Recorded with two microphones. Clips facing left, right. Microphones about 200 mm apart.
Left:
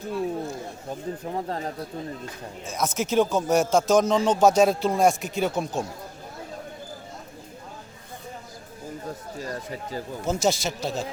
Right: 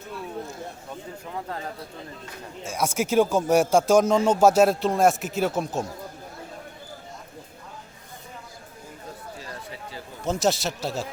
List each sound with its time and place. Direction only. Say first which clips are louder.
0.9 s speech: left 6 dB; 35° left (ahead or behind)
2.6 s a man's voice: right 1 dB; 10° right (ahead or behind)
9.4 s a sound: left 6 dB; 45° left (ahead or behind)
10.2 s a man's voice: right 1 dB; centre (ahead or behind)